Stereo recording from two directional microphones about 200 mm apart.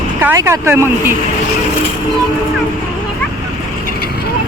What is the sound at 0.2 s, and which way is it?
Speech, 10° right (ahead or behind).